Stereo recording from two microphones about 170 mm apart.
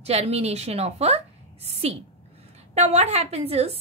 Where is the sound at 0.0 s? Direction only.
35° right (ahead or behind).